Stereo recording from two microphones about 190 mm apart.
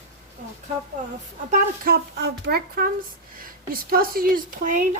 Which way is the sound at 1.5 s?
55° right (ahead or behind).